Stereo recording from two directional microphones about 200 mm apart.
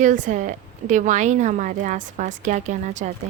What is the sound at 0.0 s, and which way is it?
A woman's voice, 40° right (ahead or behind).